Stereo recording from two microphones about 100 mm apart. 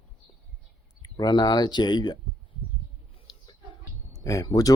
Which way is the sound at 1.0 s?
45° left (ahead or behind).